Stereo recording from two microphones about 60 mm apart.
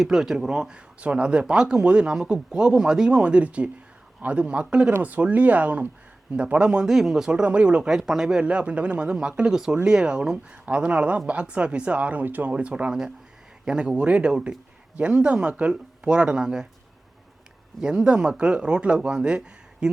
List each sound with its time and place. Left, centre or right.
0.0 s speech: centre
7.3 s speech: centre
7.9 s speech: centre
17.7 s speech: centre